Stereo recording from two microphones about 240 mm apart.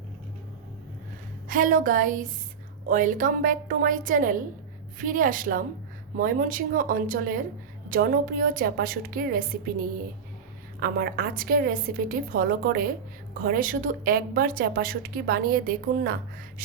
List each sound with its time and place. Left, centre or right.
1.5 s a woman's voice: right